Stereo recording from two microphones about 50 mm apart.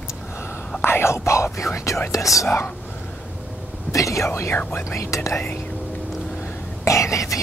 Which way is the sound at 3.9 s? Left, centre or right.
Left.